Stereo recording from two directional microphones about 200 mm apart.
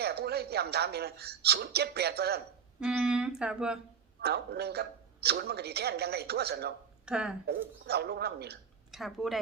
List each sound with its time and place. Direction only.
0.0 s a man's voice: 55° right (ahead or behind)
2.8 s speech: 5° right (ahead or behind)
4.2 s a man's voice: 55° right (ahead or behind)
7.0 s speech: 5° right (ahead or behind)
7.9 s a man's voice: 55° right (ahead or behind)
8.9 s speech: centre (ahead or behind)